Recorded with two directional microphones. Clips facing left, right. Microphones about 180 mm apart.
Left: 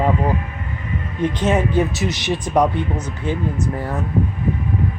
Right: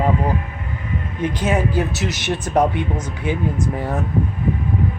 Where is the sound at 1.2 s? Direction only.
5° right (ahead or behind).